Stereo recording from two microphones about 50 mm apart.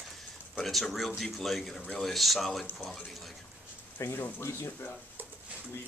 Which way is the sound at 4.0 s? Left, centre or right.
Left.